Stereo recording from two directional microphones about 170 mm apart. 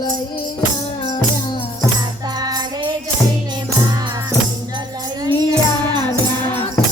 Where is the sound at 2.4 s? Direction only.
25° right (ahead or behind).